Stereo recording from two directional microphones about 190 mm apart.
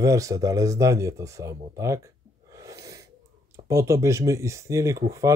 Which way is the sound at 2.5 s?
15° right (ahead or behind).